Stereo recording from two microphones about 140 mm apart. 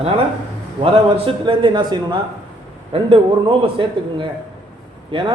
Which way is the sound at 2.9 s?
40° right (ahead or behind).